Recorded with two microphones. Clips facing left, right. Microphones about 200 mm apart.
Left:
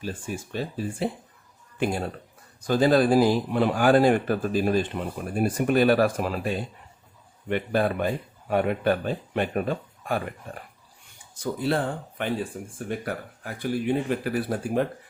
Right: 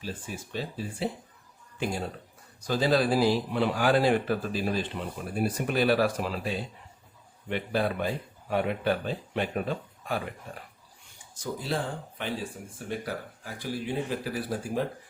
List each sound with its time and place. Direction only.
0.0 s speech: 50° left (ahead or behind)
12.6 s speech: 45° left (ahead or behind)
12.9 s speech: 55° left (ahead or behind)